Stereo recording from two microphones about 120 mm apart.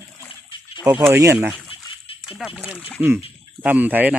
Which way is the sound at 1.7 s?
50° left (ahead or behind).